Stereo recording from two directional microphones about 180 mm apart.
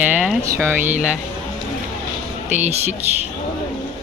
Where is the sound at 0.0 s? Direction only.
5° right (ahead or behind).